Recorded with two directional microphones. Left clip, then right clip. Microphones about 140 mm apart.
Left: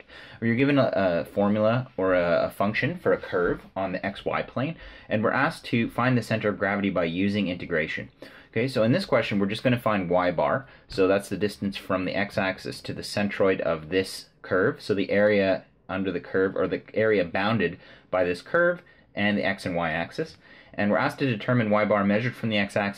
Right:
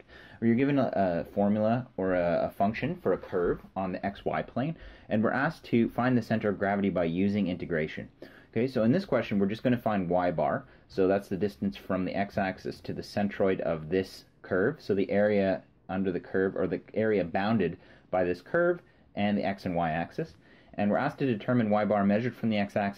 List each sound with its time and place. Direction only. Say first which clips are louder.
0.4 s speech: left 4 dB; 30° right (ahead or behind)